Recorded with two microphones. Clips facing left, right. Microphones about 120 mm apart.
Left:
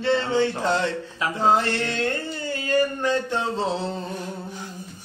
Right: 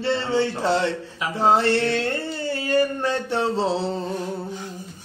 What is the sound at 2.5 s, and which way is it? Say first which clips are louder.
Speech: right 1 dB; 30° right (ahead or behind).